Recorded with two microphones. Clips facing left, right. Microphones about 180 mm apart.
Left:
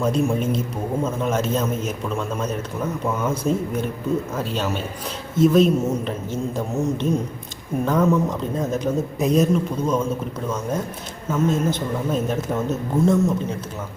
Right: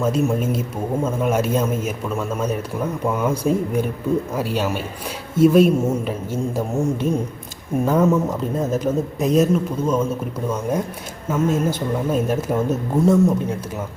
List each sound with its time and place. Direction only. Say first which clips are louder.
0.0 s a man's voice: right 1 dB; 5° right (ahead or behind)